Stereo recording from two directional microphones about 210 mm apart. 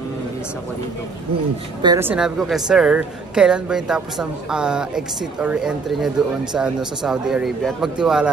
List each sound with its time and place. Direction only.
1.8 s a woman's voice: 20° right (ahead or behind)
2.0 s a woman's voice: 5° right (ahead or behind)